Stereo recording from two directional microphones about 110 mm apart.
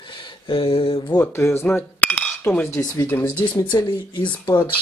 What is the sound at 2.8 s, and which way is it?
Speech, 35° left (ahead or behind).